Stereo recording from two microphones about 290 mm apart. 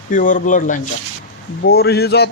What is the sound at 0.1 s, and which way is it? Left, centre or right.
A man's voice, left.